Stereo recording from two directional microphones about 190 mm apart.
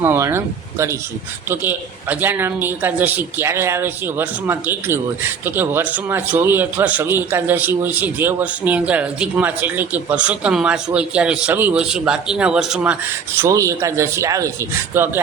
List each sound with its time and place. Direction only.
0.0 s a man's voice: 10° right (ahead or behind)
13.4 s a man's voice: 15° right (ahead or behind)